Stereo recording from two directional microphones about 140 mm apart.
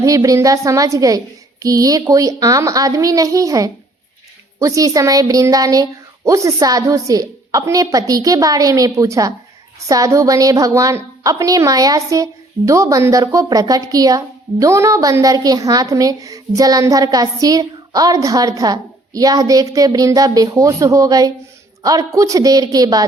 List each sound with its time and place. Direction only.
0.0 s a woman's voice: 25° right (ahead or behind)